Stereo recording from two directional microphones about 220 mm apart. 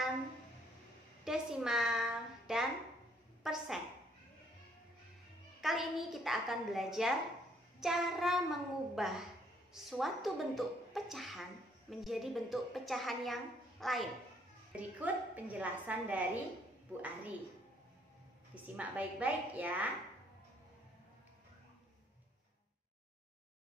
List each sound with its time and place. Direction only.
1.2 s a woman's voice: 5° right (ahead or behind)
5.6 s a woman's voice: centre (ahead or behind)
18.5 s a woman's voice: 5° right (ahead or behind)